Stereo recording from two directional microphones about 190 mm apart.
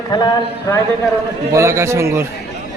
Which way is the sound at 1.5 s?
15° right (ahead or behind).